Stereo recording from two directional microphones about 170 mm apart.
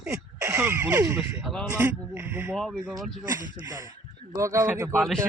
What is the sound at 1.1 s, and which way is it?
Speech, 5° right (ahead or behind).